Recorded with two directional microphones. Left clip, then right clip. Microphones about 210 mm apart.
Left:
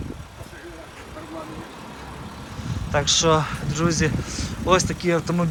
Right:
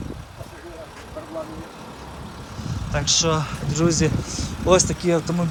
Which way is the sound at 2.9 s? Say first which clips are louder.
Left 2 dB; 15° right (ahead or behind).